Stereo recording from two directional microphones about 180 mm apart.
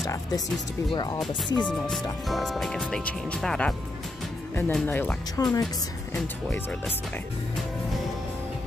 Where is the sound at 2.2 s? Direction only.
Centre (ahead or behind).